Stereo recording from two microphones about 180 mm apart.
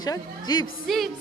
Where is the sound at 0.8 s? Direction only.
Centre (ahead or behind).